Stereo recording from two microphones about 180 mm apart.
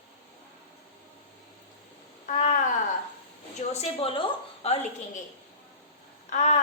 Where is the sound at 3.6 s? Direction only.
35° left (ahead or behind).